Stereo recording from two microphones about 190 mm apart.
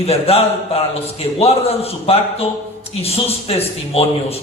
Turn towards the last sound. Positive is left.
turn(degrees=30)  # may be behind; listen again after turning